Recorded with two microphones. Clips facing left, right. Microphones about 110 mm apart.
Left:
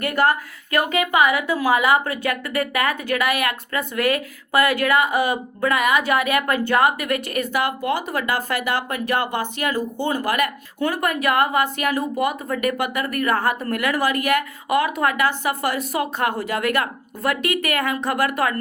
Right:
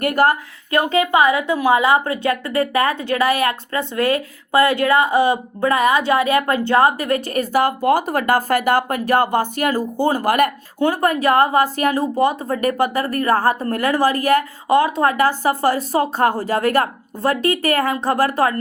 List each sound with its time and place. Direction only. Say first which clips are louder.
0.0 s a woman's voice: right 3 dB; 40° right (ahead or behind)
0.7 s a woman's voice: right 4 dB; 30° right (ahead or behind); by 10.5 s 45° right (ahead or behind)
10.8 s a woman's voice: right 5 dB; 30° right (ahead or behind)